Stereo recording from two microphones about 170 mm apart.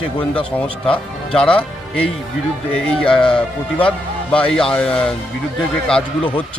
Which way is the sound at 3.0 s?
5° left (ahead or behind).